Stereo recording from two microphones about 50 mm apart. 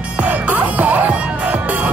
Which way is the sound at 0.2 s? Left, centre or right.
Right.